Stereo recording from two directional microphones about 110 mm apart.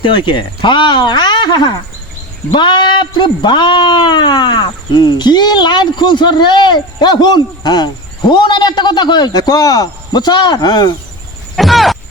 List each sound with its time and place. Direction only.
0.0 s speech: 45° left (ahead or behind)
11.5 s speech: centre (ahead or behind)